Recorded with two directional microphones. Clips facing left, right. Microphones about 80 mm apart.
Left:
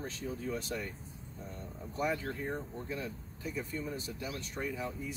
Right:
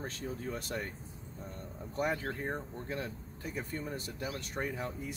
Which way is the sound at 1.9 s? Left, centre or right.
Right.